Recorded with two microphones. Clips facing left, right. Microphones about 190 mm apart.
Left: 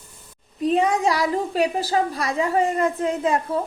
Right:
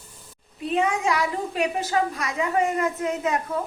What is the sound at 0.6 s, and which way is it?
A woman's voice, 35° left (ahead or behind).